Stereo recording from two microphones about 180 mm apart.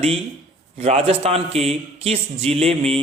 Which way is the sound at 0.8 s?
35° right (ahead or behind).